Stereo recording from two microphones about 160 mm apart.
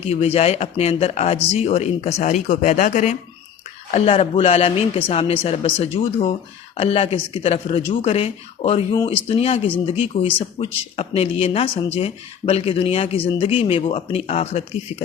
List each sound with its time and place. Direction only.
0.0 s speech: 40° left (ahead or behind)